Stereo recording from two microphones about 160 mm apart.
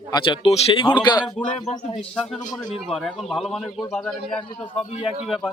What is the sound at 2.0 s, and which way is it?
A man's voice, 5° left (ahead or behind).